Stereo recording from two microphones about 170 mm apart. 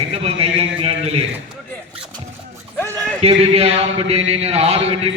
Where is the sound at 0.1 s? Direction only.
35° right (ahead or behind).